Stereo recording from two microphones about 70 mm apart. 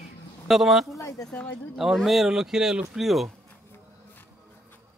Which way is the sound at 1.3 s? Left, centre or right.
Left.